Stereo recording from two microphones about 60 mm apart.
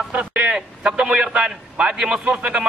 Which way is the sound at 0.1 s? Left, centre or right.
Right.